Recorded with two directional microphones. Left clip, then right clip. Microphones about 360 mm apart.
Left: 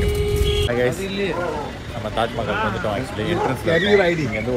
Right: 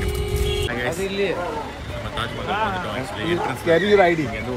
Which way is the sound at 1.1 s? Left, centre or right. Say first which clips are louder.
Right 1 dB; right.